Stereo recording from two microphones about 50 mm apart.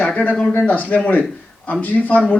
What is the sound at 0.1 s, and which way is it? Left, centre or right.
Speech, left.